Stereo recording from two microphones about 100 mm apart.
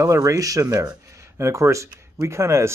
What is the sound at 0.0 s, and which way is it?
Speech, 35° right (ahead or behind).